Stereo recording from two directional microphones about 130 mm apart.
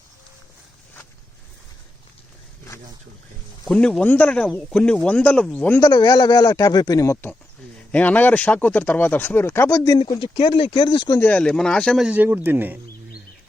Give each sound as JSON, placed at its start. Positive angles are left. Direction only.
{"t": 3.7, "sound": "speech", "side_deg": 5}
{"t": 5.8, "sound": "speech", "side_deg": 30}
{"t": 10.2, "sound": "speech", "side_deg": 40}
{"t": 11.2, "sound": "speech", "side_deg": 10}
{"t": 12.0, "sound": "speech", "side_deg": -15}